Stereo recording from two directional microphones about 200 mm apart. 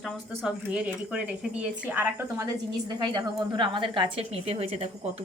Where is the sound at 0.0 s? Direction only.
Centre (ahead or behind).